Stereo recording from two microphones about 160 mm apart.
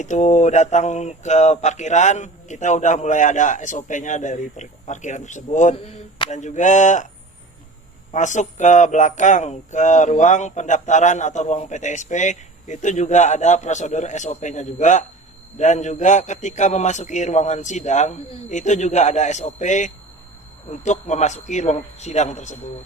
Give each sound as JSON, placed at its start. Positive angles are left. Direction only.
{"t": 0.0, "sound": "speech", "side_deg": 50}
{"t": 8.1, "sound": "speech", "side_deg": 50}